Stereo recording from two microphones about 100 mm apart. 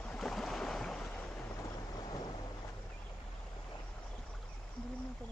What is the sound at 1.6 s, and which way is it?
Boat, 40° left (ahead or behind).